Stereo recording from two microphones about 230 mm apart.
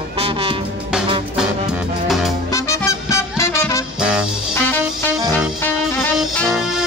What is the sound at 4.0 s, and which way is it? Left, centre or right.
Music, centre.